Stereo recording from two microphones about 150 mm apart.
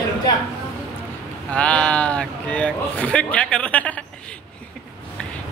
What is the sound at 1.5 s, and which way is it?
A man's voice, 10° left (ahead or behind).